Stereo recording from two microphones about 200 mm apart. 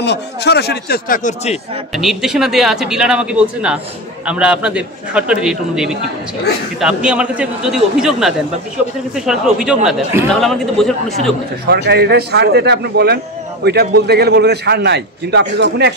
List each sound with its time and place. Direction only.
0.0 s a man's voice: 60° left (ahead or behind); by 1.6 s 35° left (ahead or behind)
2.0 s speech: centre (ahead or behind)
11.6 s a man's voice: 55° right (ahead or behind)